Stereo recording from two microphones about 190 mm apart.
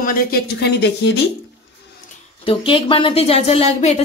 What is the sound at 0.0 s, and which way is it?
Speech, 50° left (ahead or behind).